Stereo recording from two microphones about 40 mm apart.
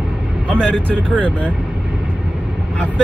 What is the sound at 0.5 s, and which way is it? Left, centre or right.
Speech, left.